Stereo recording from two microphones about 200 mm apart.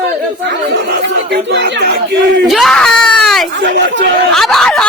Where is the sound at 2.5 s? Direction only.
Centre (ahead or behind).